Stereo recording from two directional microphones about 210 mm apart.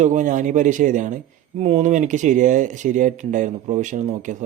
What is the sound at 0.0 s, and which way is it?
Speech, 35° right (ahead or behind).